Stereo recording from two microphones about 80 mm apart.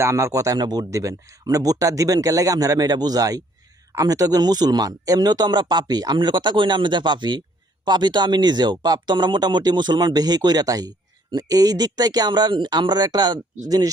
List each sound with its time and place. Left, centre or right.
0.0 s a man's voice: right
0.9 s a man's voice: right